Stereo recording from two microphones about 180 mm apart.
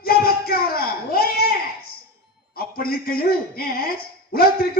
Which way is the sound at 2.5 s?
55° left (ahead or behind).